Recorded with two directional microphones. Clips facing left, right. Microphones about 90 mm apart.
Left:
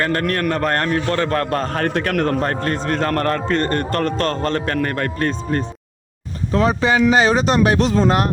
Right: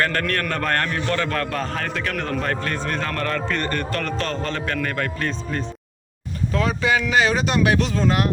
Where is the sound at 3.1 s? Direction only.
45° left (ahead or behind).